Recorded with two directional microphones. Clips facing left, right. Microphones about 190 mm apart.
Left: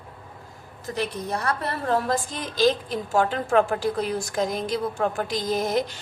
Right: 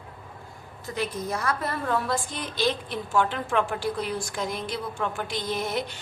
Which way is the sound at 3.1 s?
40° left (ahead or behind).